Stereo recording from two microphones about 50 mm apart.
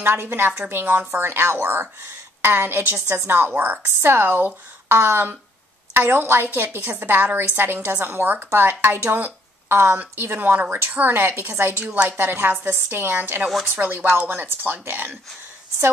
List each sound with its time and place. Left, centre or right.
0.0 s a woman's voice: right
11.8 s a woman's voice: right